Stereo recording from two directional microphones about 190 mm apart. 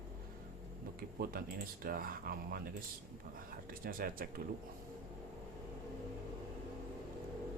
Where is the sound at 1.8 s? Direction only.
50° right (ahead or behind).